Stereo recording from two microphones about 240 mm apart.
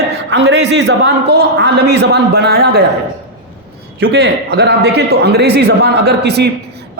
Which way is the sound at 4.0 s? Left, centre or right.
Right.